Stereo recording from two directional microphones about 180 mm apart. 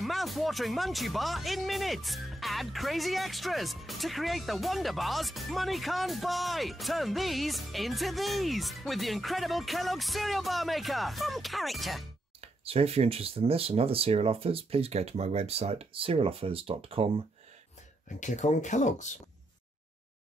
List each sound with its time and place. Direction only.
0.0 s speech: centre (ahead or behind)
12.4 s speech: 35° right (ahead or behind)
18.2 s speech: 40° left (ahead or behind)